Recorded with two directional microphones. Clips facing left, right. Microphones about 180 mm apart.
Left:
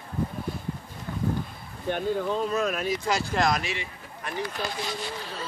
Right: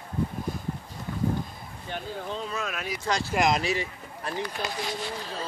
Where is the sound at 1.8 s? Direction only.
50° left (ahead or behind).